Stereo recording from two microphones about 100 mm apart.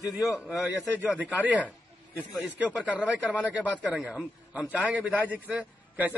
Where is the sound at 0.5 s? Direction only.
20° right (ahead or behind).